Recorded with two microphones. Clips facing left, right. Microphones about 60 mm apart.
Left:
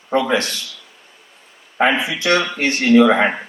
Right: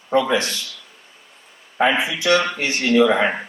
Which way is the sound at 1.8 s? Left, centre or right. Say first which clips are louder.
Left 1 dB; left.